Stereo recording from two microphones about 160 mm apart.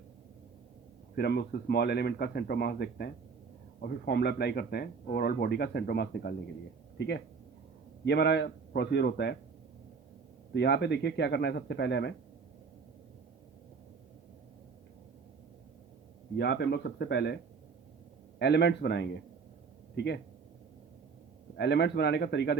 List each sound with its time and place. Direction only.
1.1 s a man's voice: 85° left
10.5 s a man's voice: 90° left
16.4 s a man's voice: 90° left
18.3 s a man's voice: 90° left
21.6 s a man's voice: 90° left